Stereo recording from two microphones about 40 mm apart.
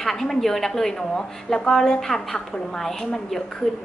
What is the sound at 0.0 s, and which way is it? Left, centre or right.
A woman's voice, centre.